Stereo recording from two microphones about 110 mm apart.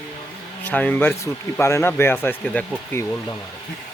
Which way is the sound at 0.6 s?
15° left (ahead or behind).